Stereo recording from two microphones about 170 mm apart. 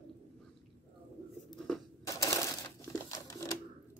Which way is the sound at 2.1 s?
20° left (ahead or behind).